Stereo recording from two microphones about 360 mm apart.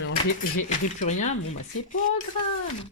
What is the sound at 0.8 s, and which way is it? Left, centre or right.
Speech, centre.